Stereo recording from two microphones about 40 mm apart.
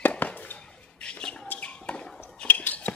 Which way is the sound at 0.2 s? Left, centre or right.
Left.